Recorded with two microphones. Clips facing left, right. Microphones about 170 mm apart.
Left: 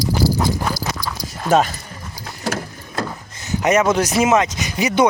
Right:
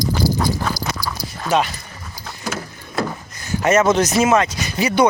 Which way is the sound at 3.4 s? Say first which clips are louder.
Even; 20° left (ahead or behind).